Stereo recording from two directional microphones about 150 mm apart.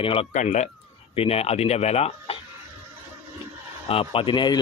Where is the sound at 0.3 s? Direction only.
55° left (ahead or behind).